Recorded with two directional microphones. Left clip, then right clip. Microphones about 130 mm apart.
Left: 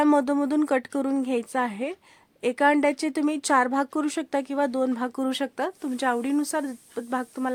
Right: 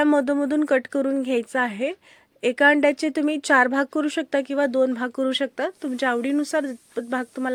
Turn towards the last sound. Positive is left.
turn(degrees=-10)  # may be behind; listen again after turning